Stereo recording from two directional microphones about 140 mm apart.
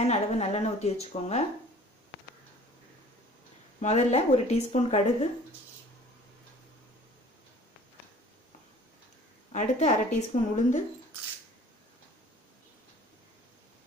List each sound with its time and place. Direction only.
0.0 s speech: 50° left (ahead or behind)
3.8 s speech: 50° left (ahead or behind)
9.5 s a woman's voice: 60° left (ahead or behind)